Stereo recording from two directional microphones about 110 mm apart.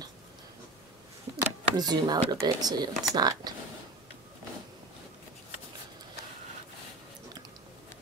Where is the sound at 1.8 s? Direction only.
40° right (ahead or behind).